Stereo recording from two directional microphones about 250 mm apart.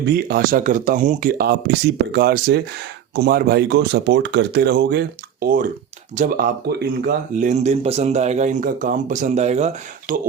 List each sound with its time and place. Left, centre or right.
0.1 s speech: right